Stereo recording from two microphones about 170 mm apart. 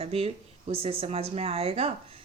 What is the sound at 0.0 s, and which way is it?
Speech, 35° right (ahead or behind).